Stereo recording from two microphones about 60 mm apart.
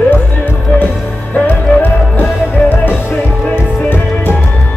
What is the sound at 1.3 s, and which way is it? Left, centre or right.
Music, left.